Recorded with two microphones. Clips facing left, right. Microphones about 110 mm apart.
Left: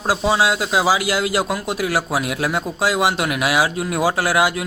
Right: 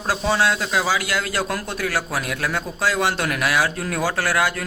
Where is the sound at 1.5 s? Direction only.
10° left (ahead or behind).